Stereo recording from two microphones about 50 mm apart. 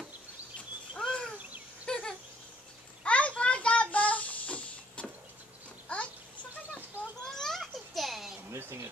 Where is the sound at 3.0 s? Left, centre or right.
Left.